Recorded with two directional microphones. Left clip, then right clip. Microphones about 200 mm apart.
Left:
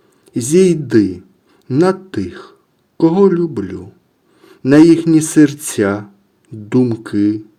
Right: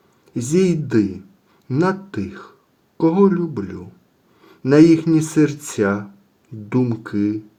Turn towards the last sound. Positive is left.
turn(degrees=35)  # may be behind; listen again after turning